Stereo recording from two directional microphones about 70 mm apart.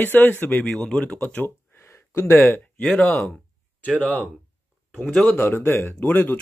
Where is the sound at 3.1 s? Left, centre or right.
Centre.